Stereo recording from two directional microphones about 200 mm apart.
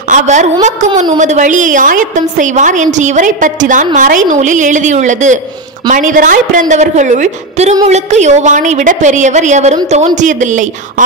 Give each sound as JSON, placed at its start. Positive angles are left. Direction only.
{"t": 0.1, "sound": "a woman's voice", "side_deg": -40}